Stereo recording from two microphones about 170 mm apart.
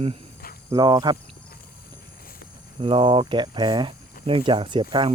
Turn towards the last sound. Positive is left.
turn(degrees=-30)  # may be behind; listen again after turning